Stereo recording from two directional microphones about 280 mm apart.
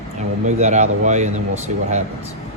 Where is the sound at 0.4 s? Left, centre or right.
Right.